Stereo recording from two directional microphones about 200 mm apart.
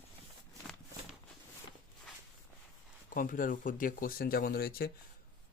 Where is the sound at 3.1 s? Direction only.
45° left (ahead or behind).